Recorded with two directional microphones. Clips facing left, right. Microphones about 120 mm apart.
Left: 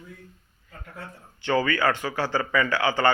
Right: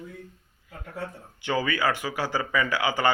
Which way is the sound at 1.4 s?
15° right (ahead or behind).